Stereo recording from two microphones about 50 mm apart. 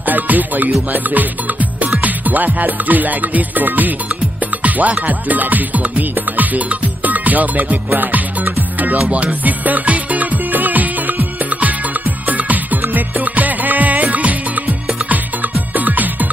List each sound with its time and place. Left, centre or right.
0.0 s music: right
0.9 s speech: right
4.6 s music: right